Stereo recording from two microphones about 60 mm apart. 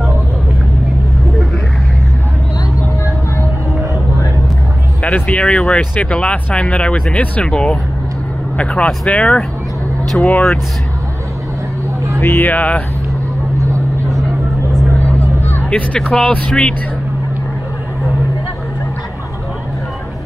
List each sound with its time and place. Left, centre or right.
5.1 s speech: left
12.2 s speech: left
12.5 s speech: left
15.7 s speech: centre